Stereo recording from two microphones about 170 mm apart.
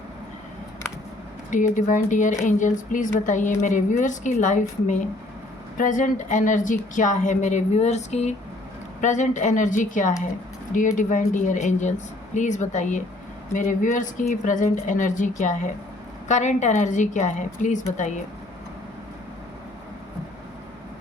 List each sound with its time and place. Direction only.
1.5 s a woman's voice: 45° left (ahead or behind)